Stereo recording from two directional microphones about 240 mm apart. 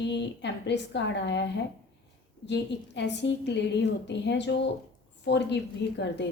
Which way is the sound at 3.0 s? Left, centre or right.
Left.